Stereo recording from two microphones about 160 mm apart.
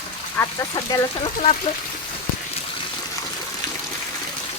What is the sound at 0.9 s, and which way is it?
Speech, 30° left (ahead or behind).